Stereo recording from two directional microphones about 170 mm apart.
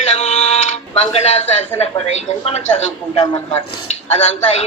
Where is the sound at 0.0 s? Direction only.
40° left (ahead or behind).